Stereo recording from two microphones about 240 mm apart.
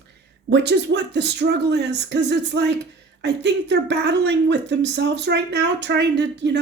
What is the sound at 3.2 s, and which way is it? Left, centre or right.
Speech, right.